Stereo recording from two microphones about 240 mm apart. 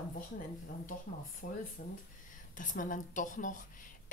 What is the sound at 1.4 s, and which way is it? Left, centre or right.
A woman's voice, left.